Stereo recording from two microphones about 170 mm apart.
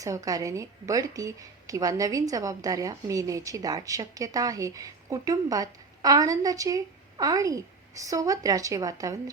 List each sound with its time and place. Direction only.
0.0 s a woman's voice: 20° right (ahead or behind)